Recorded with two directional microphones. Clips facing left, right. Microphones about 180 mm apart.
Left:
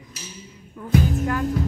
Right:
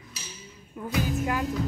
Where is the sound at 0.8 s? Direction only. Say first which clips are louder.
Left 6 dB; 10° right (ahead or behind).